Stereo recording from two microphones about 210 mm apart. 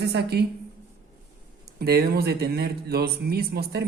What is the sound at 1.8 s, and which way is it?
Speech, 50° right (ahead or behind).